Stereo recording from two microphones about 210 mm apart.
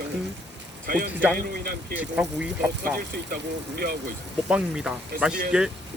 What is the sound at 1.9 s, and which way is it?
Speech, 5° right (ahead or behind).